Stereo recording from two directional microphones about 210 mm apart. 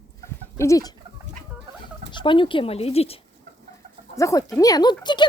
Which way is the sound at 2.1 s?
25° left (ahead or behind).